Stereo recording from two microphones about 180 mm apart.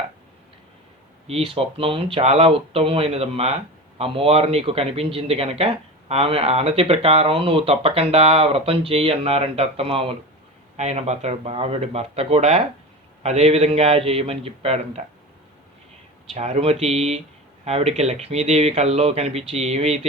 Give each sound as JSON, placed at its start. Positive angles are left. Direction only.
{"t": 1.3, "sound": "speech", "side_deg": -30}
{"t": 16.3, "sound": "speech", "side_deg": -35}